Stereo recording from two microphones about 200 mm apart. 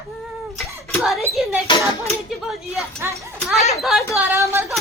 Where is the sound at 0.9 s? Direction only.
Centre (ahead or behind).